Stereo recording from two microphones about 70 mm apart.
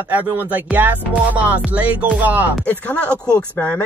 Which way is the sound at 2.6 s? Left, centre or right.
Left.